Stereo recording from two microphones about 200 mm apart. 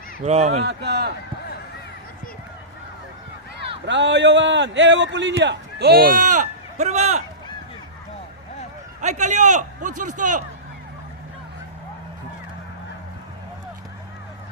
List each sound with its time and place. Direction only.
0.2 s a man's voice: 35° right (ahead or behind)
0.6 s a man's voice: 60° right (ahead or behind)
3.8 s a man's voice: 60° right (ahead or behind); by 7.2 s 35° right (ahead or behind)
9.0 s a man's voice: 35° right (ahead or behind)